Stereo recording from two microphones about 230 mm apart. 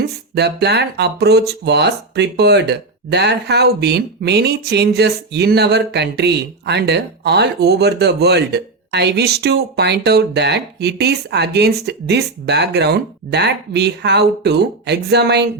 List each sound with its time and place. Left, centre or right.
0.0 s speech: right